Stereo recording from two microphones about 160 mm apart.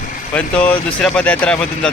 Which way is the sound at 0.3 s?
10° left (ahead or behind).